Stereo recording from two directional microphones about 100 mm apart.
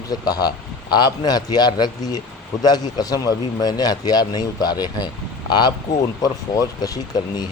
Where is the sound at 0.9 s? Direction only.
45° left (ahead or behind).